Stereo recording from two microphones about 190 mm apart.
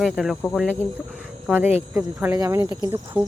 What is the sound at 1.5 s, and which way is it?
Speech, 10° right (ahead or behind).